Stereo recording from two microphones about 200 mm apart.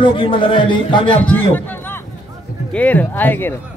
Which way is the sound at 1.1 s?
5° left (ahead or behind).